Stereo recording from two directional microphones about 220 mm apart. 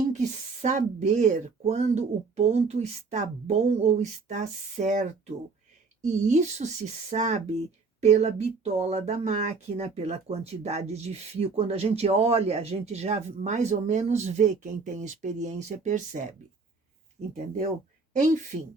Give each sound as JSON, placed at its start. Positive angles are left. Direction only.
{"t": 0.1, "sound": "speech", "side_deg": -35}
{"t": 18.5, "sound": "speech", "side_deg": -30}